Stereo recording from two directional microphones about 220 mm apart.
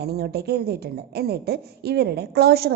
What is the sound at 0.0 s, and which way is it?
A woman's voice, 45° right (ahead or behind).